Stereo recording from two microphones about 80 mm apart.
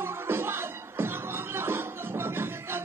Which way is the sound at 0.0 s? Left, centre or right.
Right.